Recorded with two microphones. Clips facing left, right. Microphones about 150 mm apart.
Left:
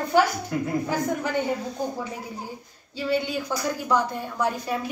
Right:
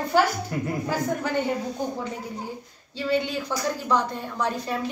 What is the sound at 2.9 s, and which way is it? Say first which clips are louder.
A woman's voice: even; 10° left (ahead or behind).